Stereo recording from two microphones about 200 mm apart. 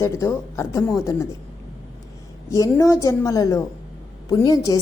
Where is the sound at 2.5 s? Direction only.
15° left (ahead or behind).